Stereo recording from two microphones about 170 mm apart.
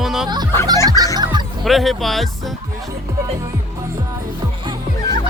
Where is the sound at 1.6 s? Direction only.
Centre (ahead or behind).